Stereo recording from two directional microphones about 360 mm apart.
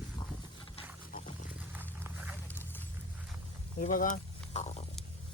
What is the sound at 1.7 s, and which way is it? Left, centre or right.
Horse, centre.